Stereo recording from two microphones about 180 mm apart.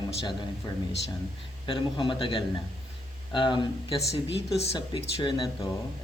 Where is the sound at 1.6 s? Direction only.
25° left (ahead or behind).